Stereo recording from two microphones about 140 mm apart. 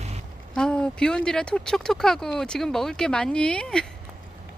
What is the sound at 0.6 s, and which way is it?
Speech, 5° left (ahead or behind).